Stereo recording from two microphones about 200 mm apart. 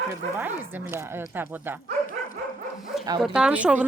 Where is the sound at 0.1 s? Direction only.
10° right (ahead or behind).